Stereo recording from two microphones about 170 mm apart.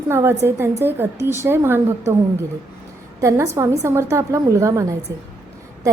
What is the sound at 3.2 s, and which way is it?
A woman's voice, 20° right (ahead or behind).